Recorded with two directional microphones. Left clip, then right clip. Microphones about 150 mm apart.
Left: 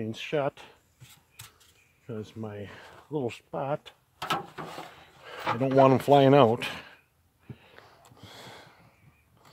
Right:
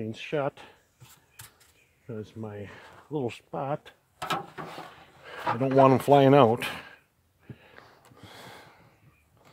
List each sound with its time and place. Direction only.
0.0 s speech: 30° right (ahead or behind)
2.0 s speech: 25° right (ahead or behind)
4.2 s drawer open or close: 20° right (ahead or behind)
5.6 s speech: 25° right (ahead or behind)
7.4 s a sound: 20° right (ahead or behind)